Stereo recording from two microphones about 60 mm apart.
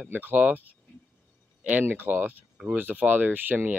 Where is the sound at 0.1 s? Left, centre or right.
Right.